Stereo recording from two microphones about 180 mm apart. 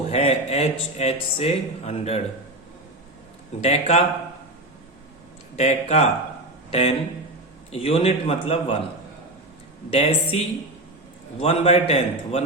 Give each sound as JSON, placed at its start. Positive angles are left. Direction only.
{"t": 0.1, "sound": "speech", "side_deg": 35}
{"t": 3.6, "sound": "speech", "side_deg": 35}
{"t": 5.5, "sound": "speech", "side_deg": 35}
{"t": 9.9, "sound": "speech", "side_deg": 35}